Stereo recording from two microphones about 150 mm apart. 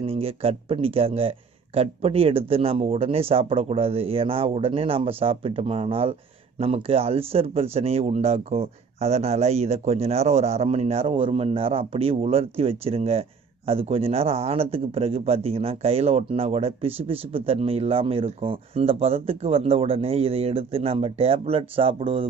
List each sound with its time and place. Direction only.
0.0 s speech: 40° right (ahead or behind)